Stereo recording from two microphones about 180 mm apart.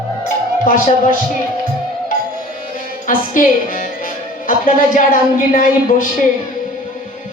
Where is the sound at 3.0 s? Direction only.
50° left (ahead or behind).